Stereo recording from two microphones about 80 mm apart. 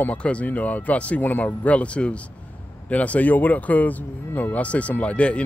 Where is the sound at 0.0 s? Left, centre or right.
Centre.